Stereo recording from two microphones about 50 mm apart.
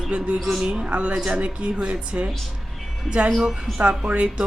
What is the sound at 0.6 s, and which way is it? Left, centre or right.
Speech, right.